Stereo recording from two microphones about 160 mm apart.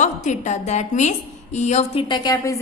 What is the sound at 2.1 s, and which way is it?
Speech, 25° left (ahead or behind).